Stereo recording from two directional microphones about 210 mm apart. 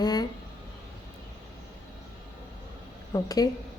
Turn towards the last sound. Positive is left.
turn(degrees=15)  # may be behind; listen again after turning